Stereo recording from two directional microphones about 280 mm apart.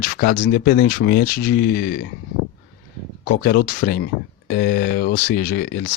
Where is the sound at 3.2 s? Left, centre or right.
Left.